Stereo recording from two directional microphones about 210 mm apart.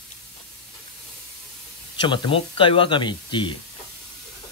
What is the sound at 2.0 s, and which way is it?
Speech, 20° left (ahead or behind).